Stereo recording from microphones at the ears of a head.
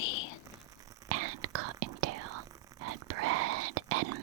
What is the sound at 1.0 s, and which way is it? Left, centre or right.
Whispering, right.